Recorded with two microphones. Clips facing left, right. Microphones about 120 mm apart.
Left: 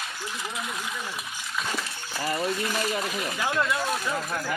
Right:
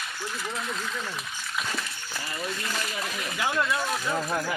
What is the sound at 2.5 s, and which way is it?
Speech, 15° left (ahead or behind).